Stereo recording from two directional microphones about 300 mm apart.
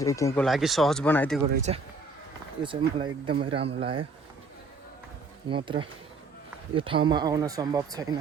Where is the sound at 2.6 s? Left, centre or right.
Centre.